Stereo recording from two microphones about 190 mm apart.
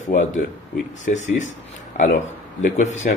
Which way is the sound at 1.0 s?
40° left (ahead or behind).